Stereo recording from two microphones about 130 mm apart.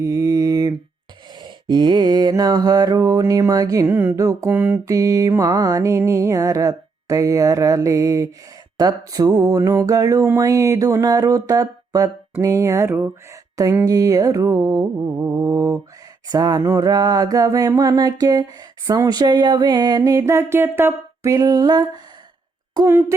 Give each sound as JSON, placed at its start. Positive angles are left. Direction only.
{"t": 0.0, "sound": "mantra", "side_deg": -25}
{"t": 1.4, "sound": "music", "side_deg": -35}
{"t": 4.4, "sound": "mantra", "side_deg": -15}
{"t": 4.9, "sound": "music", "side_deg": -25}
{"t": 21.3, "sound": "music", "side_deg": -30}
{"t": 22.9, "sound": "music", "side_deg": -20}